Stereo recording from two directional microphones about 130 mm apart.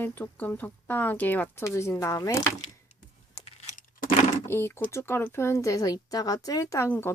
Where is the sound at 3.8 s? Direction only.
85° left.